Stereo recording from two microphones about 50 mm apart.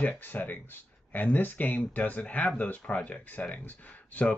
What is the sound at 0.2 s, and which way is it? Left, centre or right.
Speech, left.